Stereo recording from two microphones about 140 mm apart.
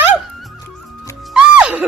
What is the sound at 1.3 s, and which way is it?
Music, 5° right (ahead or behind).